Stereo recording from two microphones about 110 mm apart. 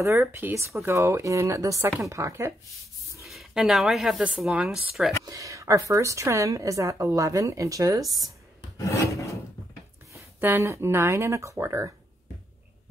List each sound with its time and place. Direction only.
0.0 s a woman's voice: 25° right (ahead or behind)
3.2 s speech: centre (ahead or behind)
5.2 s a woman's voice: 30° right (ahead or behind)
8.7 s filing: 30° left (ahead or behind)
10.1 s a woman's voice: 25° right (ahead or behind)